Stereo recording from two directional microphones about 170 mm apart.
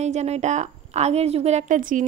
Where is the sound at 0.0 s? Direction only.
40° right (ahead or behind).